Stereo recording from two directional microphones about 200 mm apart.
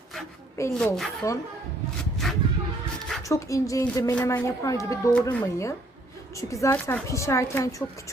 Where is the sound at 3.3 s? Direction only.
15° left (ahead or behind).